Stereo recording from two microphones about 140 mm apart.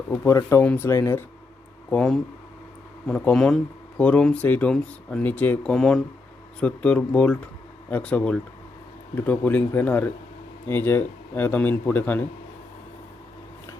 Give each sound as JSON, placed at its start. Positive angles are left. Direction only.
{"t": 0.1, "sound": "speech", "side_deg": 20}
{"t": 1.9, "sound": "speech", "side_deg": 5}